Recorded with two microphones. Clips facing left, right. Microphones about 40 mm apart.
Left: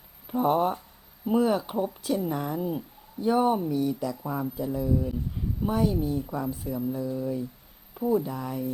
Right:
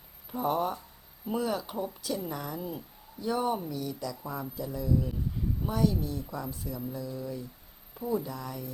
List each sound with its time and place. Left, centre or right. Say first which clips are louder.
0.3 s speech: left 6 dB; centre
4.2 s speech: left 6 dB; centre